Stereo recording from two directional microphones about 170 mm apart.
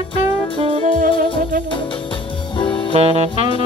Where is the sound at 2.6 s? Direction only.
30° left (ahead or behind).